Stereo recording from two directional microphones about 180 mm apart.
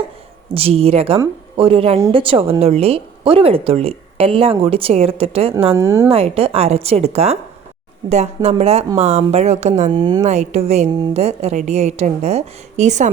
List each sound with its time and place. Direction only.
0.4 s speech: 30° right (ahead or behind)
5.7 s speech: 15° right (ahead or behind)
6.1 s speech: 30° right (ahead or behind)
10.0 s speech: 25° right (ahead or behind)
10.2 s speech: 40° right (ahead or behind)